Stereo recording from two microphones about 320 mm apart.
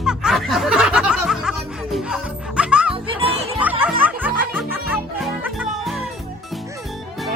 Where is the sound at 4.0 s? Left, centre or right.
Centre.